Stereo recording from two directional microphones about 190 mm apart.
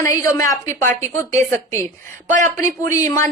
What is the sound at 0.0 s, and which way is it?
A woman's voice, 15° left (ahead or behind).